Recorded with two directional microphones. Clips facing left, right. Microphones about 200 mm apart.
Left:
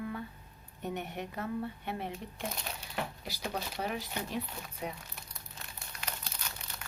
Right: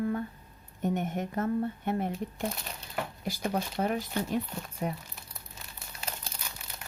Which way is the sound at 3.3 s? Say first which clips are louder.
Right 6 dB; 50° right (ahead or behind).